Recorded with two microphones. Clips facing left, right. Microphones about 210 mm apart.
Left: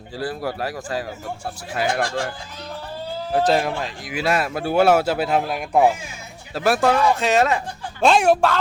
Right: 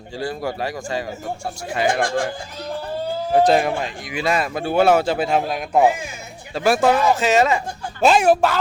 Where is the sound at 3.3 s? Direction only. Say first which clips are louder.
Right 3 dB; centre (ahead or behind).